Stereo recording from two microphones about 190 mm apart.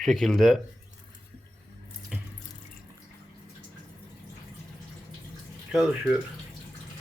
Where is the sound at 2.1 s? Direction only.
5° right (ahead or behind).